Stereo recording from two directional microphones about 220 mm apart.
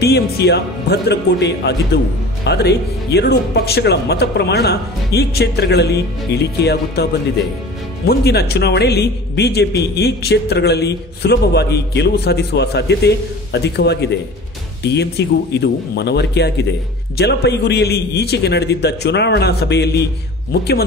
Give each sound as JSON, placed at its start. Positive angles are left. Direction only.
{"t": 0.0, "sound": "speech", "side_deg": 45}